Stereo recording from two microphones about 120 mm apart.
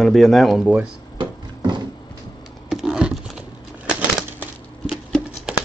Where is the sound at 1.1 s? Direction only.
40° right (ahead or behind).